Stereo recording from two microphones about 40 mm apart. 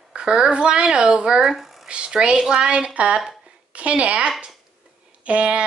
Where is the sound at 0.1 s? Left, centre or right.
Right.